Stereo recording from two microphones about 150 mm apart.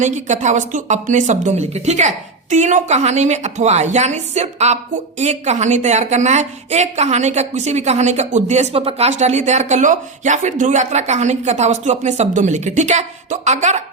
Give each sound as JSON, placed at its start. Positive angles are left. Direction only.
{"t": 0.0, "sound": "a woman's voice", "side_deg": -55}